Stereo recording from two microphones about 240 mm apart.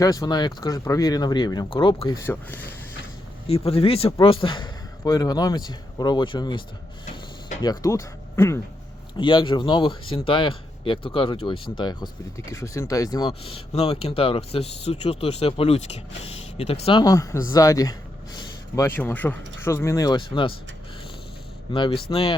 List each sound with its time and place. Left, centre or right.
0.0 s speech: centre
3.7 s speech: left
7.6 s speech: centre
21.7 s speech: left